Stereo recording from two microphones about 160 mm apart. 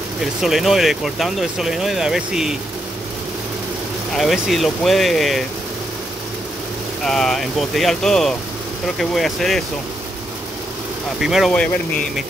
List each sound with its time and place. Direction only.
0.2 s speech: centre (ahead or behind)
4.1 s speech: centre (ahead or behind)
7.1 s speech: 5° left (ahead or behind)
11.1 s speech: centre (ahead or behind)